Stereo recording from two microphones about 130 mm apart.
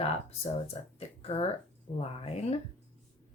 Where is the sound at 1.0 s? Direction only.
50° left (ahead or behind).